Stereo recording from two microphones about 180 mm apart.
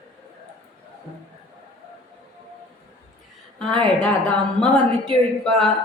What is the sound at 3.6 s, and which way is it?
A woman's voice, 5° left (ahead or behind).